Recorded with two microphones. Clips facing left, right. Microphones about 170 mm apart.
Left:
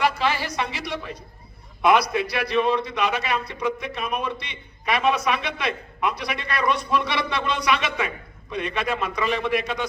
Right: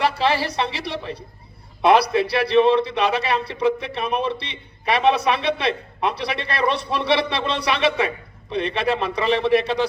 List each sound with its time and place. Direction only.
0.0 s a man's voice: 30° right (ahead or behind)